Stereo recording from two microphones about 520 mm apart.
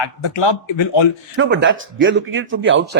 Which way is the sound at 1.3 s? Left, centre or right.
Right.